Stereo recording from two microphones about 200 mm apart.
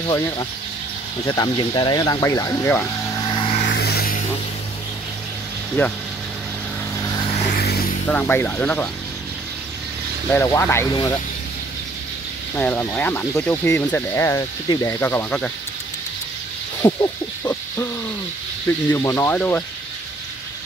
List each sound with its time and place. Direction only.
0.0 s speech: 20° left (ahead or behind)
3.6 s a sound: 55° left (ahead or behind)
5.8 s speech: 10° left (ahead or behind)
7.0 s vehicle: 20° left (ahead or behind)
7.5 s a sound: 50° left (ahead or behind)
8.1 s speech: 10° left (ahead or behind)
10.3 s speech: 15° left (ahead or behind)
12.5 s speech: 10° left (ahead or behind)
16.8 s a sound: 15° left (ahead or behind)
18.7 s speech: 10° left (ahead or behind)